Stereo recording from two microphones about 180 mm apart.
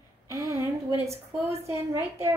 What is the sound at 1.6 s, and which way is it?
Speech, 15° right (ahead or behind).